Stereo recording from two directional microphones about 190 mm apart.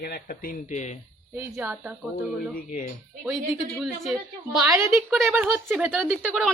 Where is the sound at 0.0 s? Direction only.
50° left (ahead or behind).